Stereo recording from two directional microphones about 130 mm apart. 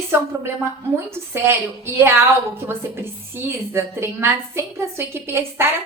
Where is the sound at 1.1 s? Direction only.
20° right (ahead or behind).